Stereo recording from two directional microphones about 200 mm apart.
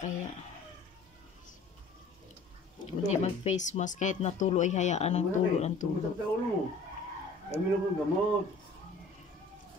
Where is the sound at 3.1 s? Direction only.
35° left (ahead or behind).